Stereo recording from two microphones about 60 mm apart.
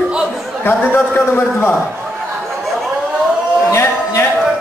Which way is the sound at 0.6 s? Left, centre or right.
Left.